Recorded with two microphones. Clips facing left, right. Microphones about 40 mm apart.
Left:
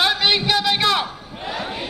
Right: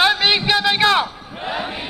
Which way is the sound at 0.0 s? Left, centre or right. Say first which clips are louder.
Right 2 dB; right.